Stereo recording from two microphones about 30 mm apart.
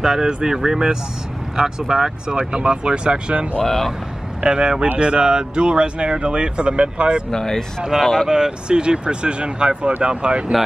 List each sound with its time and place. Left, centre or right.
0.0 s speech: centre
2.3 s speech: right
3.6 s speech: centre
4.4 s speech: right
7.2 s speech: centre
8.0 s speech: centre
8.3 s speech: right